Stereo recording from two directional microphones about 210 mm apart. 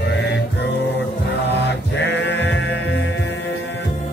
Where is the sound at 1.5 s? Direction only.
55° left (ahead or behind).